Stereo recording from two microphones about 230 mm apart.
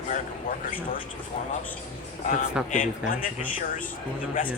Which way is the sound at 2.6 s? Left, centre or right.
Centre.